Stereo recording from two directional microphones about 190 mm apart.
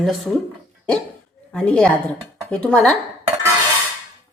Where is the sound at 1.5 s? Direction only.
5° left (ahead or behind).